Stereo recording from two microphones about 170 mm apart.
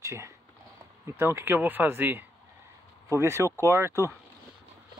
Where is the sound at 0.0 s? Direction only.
15° right (ahead or behind).